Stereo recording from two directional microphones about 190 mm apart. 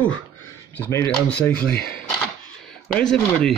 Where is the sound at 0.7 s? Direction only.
10° left (ahead or behind).